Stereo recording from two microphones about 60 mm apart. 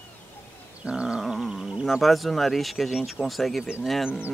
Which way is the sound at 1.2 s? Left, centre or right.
Centre.